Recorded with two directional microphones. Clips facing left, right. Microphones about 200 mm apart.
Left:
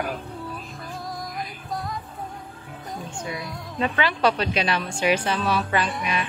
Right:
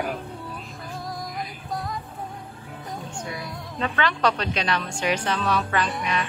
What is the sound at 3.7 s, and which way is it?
A woman's voice, 15° left (ahead or behind).